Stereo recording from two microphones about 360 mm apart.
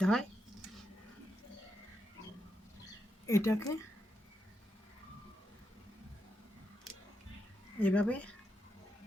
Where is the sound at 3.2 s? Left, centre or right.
Centre.